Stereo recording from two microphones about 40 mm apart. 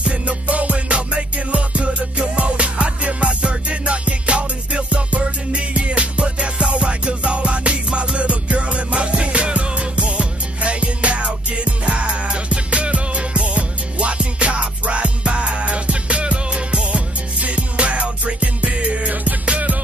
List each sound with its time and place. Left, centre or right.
0.0 s music: right